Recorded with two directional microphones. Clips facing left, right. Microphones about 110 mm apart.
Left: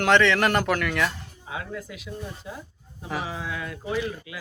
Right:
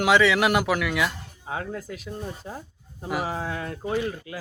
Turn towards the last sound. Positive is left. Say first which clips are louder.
# right 1 dB
turn(degrees=-40)  # may be behind; listen again after turning